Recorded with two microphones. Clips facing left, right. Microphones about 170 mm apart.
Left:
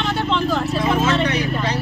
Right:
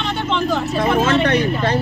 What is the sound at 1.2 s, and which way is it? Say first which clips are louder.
Speech: right 4 dB; 55° right (ahead or behind).